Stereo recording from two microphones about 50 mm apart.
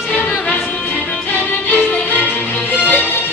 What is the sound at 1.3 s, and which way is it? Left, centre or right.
Music, left.